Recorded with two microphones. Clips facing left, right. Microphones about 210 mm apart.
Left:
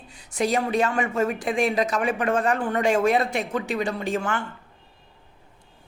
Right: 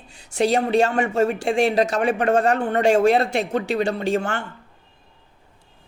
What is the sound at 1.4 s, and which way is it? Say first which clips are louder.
Speech: right 4 dB; 30° right (ahead or behind).